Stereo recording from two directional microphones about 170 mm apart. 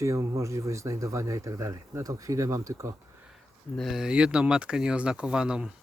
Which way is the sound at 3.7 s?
Centre (ahead or behind).